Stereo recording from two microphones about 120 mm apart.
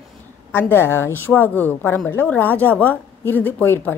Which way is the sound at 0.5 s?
20° left (ahead or behind).